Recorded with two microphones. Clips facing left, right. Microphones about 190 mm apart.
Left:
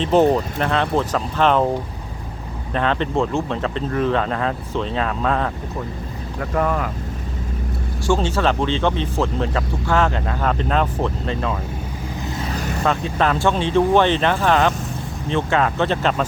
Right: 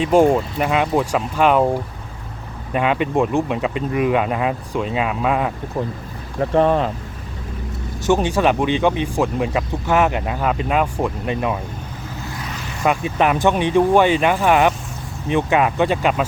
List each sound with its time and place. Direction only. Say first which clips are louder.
0.0 s speech: right 1 dB; 10° right (ahead or behind)
2.7 s speech: right 2 dB; 10° right (ahead or behind)
6.4 s speech: right 6 dB; 30° right (ahead or behind)
8.0 s speech: right 3 dB; 15° right (ahead or behind)
12.5 s vehicle: left 5 dB; 40° left (ahead or behind)
12.8 s speech: right 3 dB; 15° right (ahead or behind)